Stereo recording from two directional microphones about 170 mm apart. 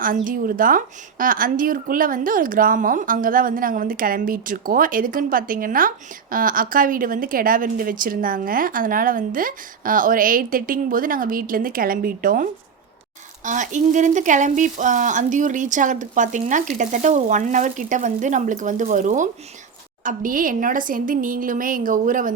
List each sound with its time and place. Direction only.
0.0 s a woman's voice: 55° right (ahead or behind)